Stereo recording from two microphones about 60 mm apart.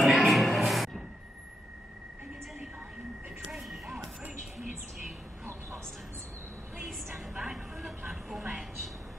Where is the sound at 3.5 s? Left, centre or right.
Centre.